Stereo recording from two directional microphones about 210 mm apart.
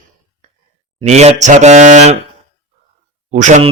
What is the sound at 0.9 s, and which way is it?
Speech, 30° right (ahead or behind).